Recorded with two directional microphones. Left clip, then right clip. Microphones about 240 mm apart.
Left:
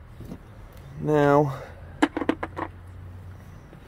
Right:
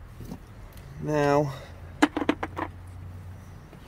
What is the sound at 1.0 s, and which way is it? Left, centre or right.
Speech, left.